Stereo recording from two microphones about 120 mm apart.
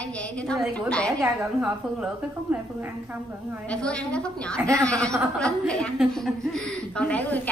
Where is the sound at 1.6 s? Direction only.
15° right (ahead or behind).